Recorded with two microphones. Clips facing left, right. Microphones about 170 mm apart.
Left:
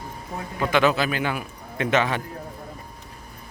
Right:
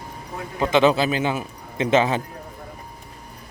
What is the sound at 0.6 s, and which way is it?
A man's voice, 25° right (ahead or behind).